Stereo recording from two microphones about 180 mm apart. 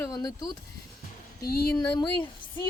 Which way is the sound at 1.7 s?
25° left (ahead or behind).